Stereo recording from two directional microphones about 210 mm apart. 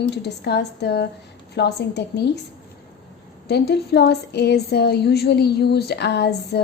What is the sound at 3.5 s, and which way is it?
Speech, 50° left (ahead or behind).